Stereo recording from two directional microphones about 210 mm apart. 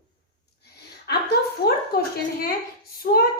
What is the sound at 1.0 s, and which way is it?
Speech, 45° left (ahead or behind).